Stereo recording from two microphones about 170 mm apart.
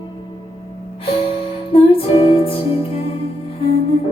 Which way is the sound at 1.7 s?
35° left (ahead or behind).